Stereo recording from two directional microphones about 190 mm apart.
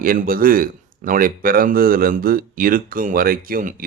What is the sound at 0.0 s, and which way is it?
Speech, 45° right (ahead or behind).